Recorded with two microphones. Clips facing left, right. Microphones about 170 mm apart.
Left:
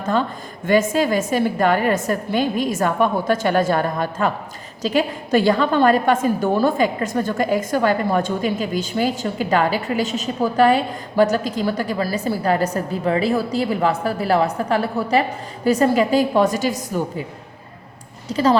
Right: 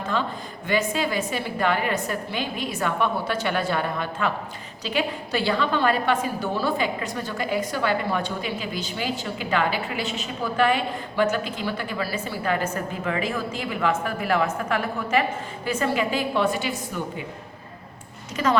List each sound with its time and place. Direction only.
0.0 s a woman's voice: 45° left (ahead or behind)
18.3 s speech: 35° left (ahead or behind)